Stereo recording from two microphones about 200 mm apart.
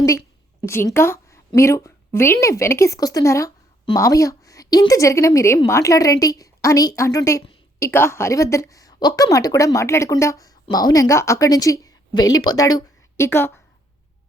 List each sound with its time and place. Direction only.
0.6 s a woman's voice: 15° left (ahead or behind)